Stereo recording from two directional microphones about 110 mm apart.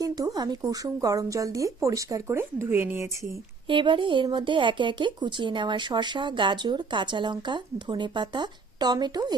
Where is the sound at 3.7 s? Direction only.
50° right (ahead or behind).